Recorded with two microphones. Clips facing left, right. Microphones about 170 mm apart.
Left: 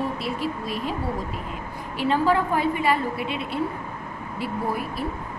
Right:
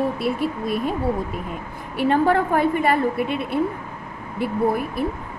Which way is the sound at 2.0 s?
55° right (ahead or behind).